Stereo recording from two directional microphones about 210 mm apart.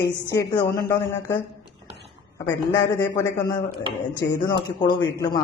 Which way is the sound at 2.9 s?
15° left (ahead or behind).